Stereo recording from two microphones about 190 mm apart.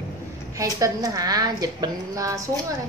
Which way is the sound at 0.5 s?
15° right (ahead or behind).